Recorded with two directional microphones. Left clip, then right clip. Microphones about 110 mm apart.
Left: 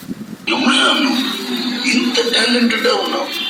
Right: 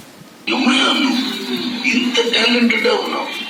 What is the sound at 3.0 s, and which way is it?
Speech, 10° left (ahead or behind).